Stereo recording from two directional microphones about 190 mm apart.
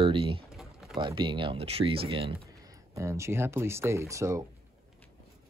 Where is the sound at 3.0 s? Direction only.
15° right (ahead or behind).